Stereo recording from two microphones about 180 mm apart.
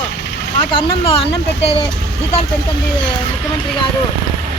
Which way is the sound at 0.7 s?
30° left (ahead or behind).